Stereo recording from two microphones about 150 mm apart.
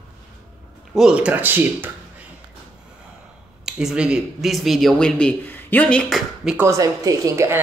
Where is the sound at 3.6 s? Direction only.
5° right (ahead or behind).